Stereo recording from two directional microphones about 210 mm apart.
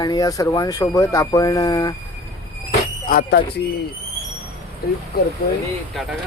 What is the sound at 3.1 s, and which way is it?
Speech, 45° left (ahead or behind).